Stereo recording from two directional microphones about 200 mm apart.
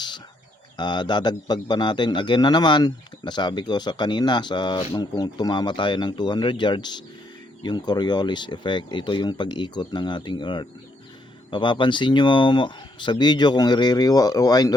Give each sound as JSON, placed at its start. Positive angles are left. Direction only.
{"t": 0.8, "sound": "a man's voice", "side_deg": 20}